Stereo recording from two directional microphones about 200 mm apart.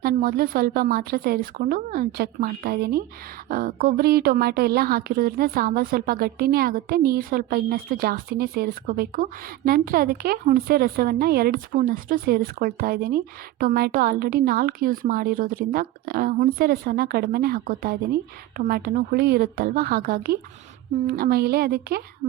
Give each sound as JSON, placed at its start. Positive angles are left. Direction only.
{"t": 0.0, "sound": "a woman's voice", "side_deg": -45}